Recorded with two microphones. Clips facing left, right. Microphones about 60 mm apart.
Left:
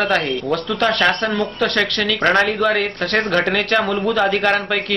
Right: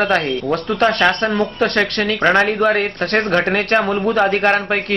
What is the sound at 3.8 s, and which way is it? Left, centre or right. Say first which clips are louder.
Speech: right 2 dB; right.